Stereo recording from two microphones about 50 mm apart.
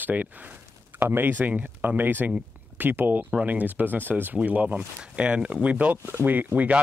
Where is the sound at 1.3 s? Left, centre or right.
Right.